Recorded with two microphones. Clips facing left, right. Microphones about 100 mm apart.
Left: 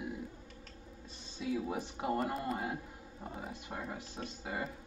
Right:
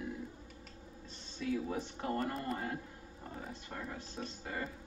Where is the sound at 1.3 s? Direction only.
15° left (ahead or behind).